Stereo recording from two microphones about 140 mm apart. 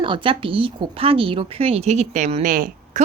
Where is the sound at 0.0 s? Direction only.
40° right (ahead or behind).